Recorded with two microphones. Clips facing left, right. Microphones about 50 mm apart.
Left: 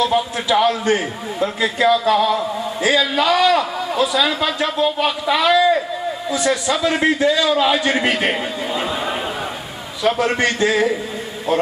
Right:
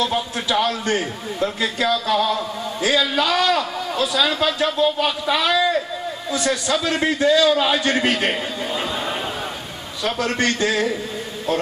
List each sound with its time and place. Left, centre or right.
0.0 s a man's voice: centre